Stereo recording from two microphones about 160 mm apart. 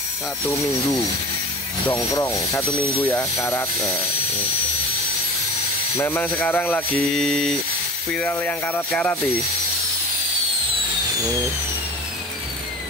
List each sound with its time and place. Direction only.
2.1 s speech: 20° left (ahead or behind)
5.9 s speech: 15° left (ahead or behind)